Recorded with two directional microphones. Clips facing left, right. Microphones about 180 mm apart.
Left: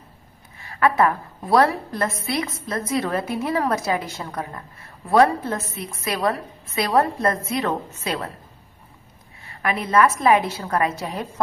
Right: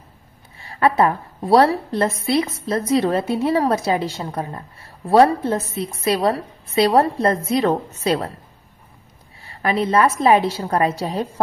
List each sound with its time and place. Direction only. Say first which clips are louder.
0.6 s a woman's voice: right 2 dB; 30° right (ahead or behind)
9.4 s a woman's voice: right 5 dB; 30° right (ahead or behind)